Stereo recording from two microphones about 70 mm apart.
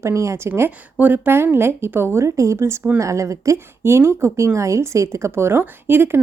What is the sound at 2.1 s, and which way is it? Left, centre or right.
A woman's voice, right.